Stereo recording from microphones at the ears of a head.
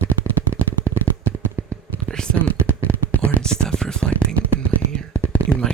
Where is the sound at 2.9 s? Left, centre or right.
Right.